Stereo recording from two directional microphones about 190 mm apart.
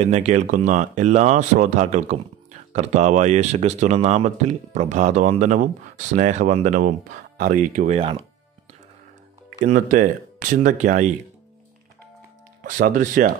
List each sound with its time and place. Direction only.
0.0 s speech: 35° right (ahead or behind)
9.6 s speech: 40° right (ahead or behind)
12.6 s speech: 45° right (ahead or behind)